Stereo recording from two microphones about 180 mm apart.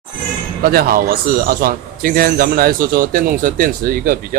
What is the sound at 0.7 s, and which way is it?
A man's voice, 55° right (ahead or behind).